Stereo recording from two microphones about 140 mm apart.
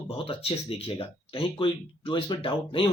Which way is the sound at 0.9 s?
40° left (ahead or behind).